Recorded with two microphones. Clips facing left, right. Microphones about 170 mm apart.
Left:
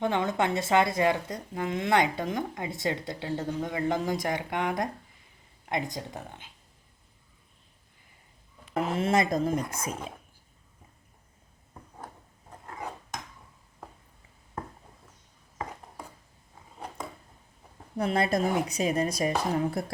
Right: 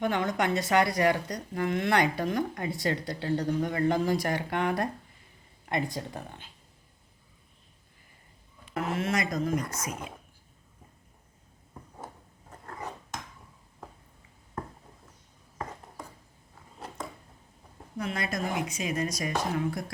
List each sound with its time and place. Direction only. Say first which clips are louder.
0.0 s speech: left 1 dB; 25° left (ahead or behind)
8.7 s speech: left 4 dB; 30° left (ahead or behind)
17.9 s speech: left 7 dB; 30° left (ahead or behind)